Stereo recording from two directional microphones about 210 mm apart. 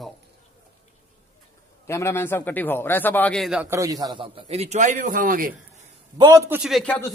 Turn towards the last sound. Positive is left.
turn(degrees=5)  # may be behind; listen again after turning